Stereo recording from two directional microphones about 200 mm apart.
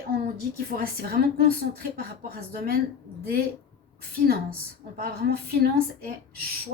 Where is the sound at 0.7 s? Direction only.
50° right (ahead or behind).